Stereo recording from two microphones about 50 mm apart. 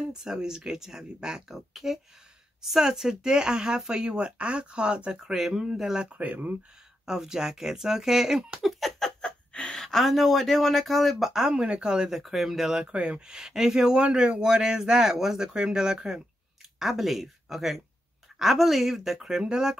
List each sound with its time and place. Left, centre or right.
0.1 s speech: centre
5.2 s speech: centre
6.0 s speech: right
7.1 s speech: centre
8.6 s a sound: centre
9.2 s a sound: centre
9.8 s speech: centre
12.2 s speech: centre
12.9 s speech: right